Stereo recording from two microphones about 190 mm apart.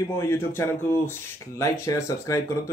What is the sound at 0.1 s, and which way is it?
Speech, 15° left (ahead or behind).